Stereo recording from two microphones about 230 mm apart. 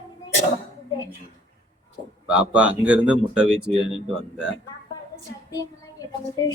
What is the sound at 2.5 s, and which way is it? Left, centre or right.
Speech, centre.